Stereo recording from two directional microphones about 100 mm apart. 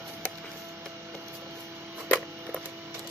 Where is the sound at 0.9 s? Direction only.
30° right (ahead or behind).